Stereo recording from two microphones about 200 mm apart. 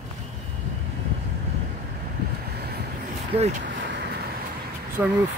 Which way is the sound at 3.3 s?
30° right (ahead or behind).